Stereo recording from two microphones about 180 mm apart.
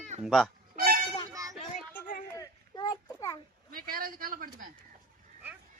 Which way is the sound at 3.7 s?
55° right (ahead or behind).